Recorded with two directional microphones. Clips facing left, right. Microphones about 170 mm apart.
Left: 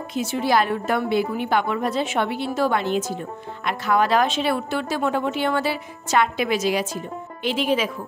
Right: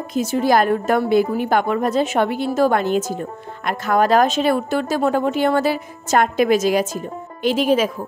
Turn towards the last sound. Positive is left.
turn(degrees=-45)  # may be behind; listen again after turning